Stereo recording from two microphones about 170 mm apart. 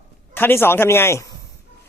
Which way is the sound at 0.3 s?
10° left (ahead or behind).